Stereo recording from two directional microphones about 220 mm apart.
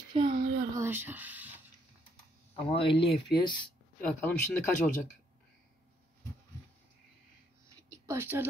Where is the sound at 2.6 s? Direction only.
25° left (ahead or behind).